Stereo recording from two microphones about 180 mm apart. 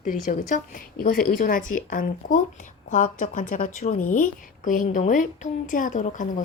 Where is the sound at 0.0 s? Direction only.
45° left (ahead or behind).